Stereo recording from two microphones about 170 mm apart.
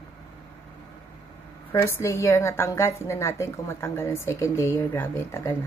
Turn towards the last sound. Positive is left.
turn(degrees=15)  # may be behind; listen again after turning